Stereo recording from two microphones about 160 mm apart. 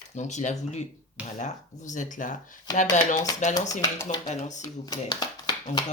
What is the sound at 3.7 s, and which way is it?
Speech, 25° left (ahead or behind).